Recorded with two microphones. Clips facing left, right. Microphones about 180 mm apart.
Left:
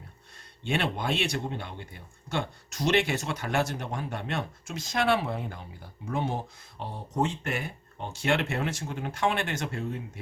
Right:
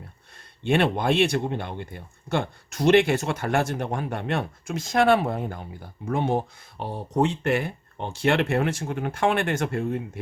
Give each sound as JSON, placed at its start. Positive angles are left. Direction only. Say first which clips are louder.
{"t": 0.7, "sound": "speech", "louder": "right 7 dB", "side_deg": -55}